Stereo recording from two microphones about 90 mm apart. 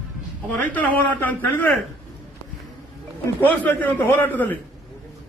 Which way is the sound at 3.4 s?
20° left (ahead or behind).